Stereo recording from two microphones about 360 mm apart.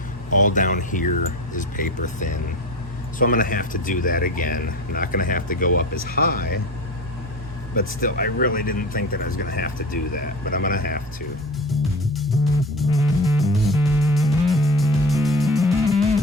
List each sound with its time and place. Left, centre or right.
0.3 s speech: left
8.0 s speech: left
11.7 s music: centre